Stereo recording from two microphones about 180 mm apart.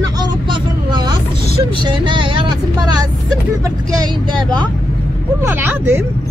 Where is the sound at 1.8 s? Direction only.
25° right (ahead or behind).